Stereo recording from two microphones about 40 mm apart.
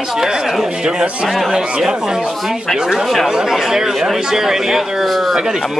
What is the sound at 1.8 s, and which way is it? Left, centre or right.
Speech, centre.